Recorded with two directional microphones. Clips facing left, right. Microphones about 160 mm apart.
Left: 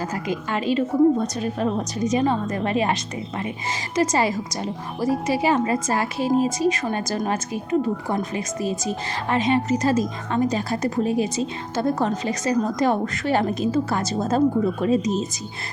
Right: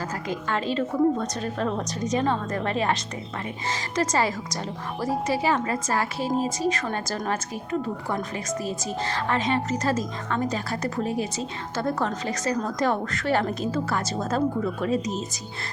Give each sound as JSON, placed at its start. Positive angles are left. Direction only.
{"t": 0.1, "sound": "a woman's voice", "side_deg": 15}